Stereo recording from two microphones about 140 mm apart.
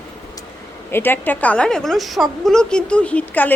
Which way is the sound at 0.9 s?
15° left (ahead or behind).